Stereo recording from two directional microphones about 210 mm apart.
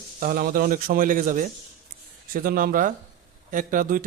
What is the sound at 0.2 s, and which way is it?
A man's voice, 45° right (ahead or behind).